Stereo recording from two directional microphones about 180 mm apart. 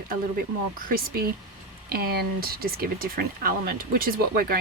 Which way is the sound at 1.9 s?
60° right (ahead or behind).